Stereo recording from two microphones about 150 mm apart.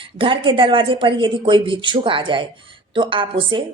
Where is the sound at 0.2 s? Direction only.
35° right (ahead or behind).